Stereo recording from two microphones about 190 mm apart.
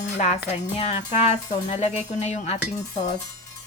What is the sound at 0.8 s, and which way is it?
Speech, 35° left (ahead or behind).